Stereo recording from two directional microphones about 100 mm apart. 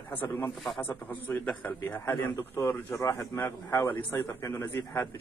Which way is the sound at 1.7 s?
20° left (ahead or behind).